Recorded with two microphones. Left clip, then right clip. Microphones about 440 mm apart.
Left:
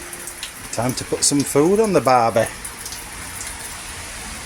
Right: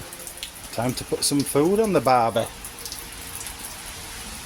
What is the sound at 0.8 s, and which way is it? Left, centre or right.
Speech, right.